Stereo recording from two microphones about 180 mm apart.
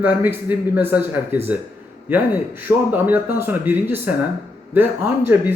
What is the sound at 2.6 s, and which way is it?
Speech, 10° right (ahead or behind).